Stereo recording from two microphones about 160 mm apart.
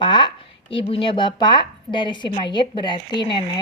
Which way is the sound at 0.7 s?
35° left (ahead or behind).